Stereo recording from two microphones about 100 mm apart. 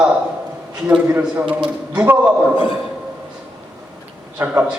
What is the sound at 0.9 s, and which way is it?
A man's voice, 15° right (ahead or behind).